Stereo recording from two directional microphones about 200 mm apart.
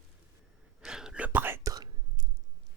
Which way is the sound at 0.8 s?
5° right (ahead or behind).